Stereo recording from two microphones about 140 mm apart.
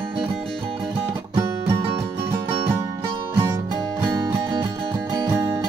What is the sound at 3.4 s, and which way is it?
Music, 30° right (ahead or behind).